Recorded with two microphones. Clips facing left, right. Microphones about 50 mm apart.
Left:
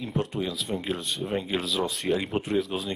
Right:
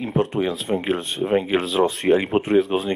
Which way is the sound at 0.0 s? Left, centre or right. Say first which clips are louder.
Right 8 dB; right.